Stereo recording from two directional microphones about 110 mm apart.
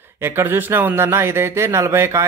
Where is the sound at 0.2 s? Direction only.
20° right (ahead or behind).